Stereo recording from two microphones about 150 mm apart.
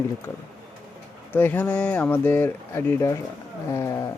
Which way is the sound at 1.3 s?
15° left (ahead or behind).